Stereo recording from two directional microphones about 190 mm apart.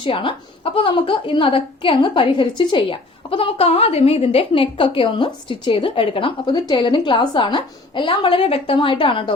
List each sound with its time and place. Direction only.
0.0 s a woman's voice: 25° left (ahead or behind)